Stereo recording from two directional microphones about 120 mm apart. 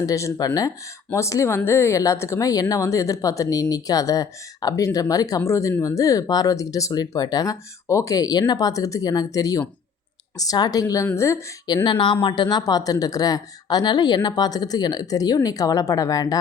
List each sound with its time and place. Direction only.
0.0 s speech: 25° left (ahead or behind)
11.6 s speech: 35° left (ahead or behind)